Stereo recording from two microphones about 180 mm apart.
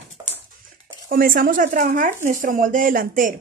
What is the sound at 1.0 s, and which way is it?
Speech, 55° right (ahead or behind).